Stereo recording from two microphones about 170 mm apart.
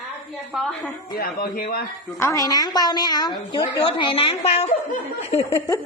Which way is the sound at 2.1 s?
20° left (ahead or behind).